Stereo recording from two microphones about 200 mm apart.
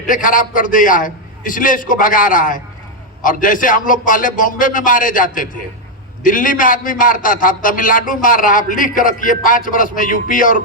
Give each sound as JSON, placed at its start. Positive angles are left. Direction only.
{"t": 0.1, "sound": "a man's voice", "side_deg": 40}